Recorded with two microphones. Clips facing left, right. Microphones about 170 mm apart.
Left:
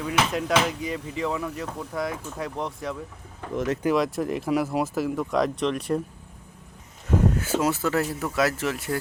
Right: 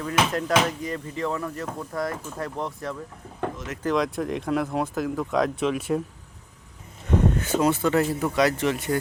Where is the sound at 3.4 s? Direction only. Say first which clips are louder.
Right 3 dB; 65° right (ahead or behind).